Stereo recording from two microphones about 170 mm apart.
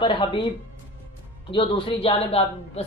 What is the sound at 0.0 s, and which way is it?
A woman's voice, 30° left (ahead or behind).